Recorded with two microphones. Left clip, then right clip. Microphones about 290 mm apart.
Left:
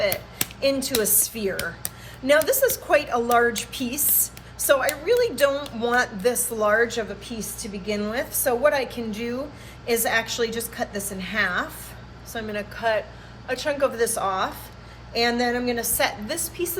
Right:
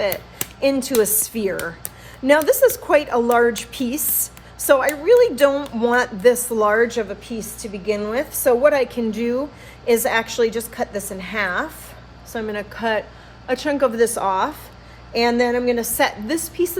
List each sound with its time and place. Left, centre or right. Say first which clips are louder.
0.6 s a woman's voice: right 5 dB; right